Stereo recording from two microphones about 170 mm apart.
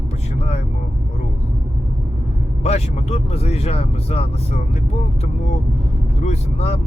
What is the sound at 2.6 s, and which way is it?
Speech, 40° left (ahead or behind).